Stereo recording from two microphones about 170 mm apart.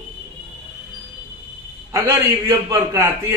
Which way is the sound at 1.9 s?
20° right (ahead or behind).